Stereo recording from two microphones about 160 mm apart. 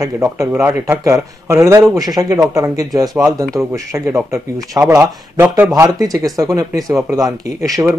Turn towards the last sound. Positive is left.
turn(degrees=-20)  # may be behind; listen again after turning